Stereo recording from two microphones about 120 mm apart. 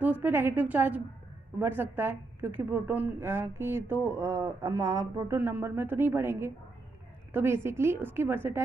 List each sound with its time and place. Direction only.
0.0 s a woman's voice: 15° right (ahead or behind)